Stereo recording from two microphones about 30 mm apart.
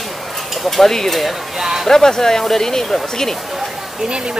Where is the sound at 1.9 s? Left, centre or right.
Centre.